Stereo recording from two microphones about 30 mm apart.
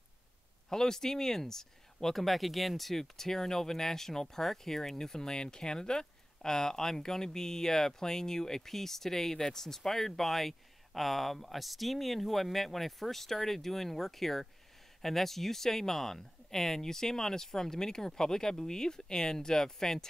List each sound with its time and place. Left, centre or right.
0.7 s speech: centre